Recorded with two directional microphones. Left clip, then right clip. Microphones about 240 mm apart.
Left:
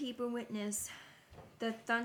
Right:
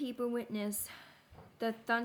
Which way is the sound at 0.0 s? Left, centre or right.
Right.